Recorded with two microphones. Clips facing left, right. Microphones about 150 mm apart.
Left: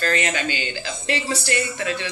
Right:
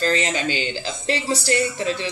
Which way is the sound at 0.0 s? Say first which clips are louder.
Right 1 dB; 30° right (ahead or behind).